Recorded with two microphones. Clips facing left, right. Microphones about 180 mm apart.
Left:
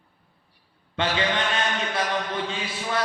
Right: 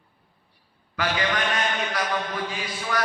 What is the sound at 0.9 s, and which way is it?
A man's voice, 25° left (ahead or behind).